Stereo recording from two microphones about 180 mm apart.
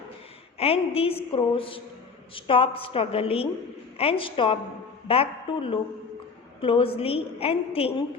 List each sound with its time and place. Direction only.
0.6 s a woman's voice: 35° left (ahead or behind)